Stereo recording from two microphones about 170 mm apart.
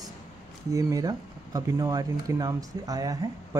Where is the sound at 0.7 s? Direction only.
20° right (ahead or behind).